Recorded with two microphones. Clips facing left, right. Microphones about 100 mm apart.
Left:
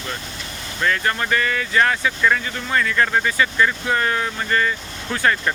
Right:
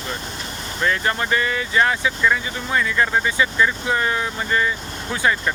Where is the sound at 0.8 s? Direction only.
25° right (ahead or behind).